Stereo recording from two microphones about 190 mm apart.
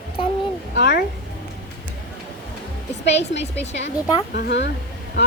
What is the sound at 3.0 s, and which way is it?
A woman's voice, 65° left (ahead or behind).